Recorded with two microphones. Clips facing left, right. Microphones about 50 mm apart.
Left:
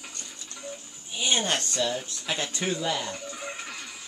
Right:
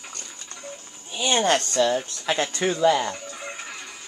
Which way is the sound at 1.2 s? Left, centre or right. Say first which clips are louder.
Right 6 dB; right.